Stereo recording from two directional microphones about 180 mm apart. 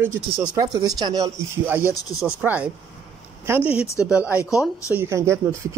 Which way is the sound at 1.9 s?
20° left (ahead or behind).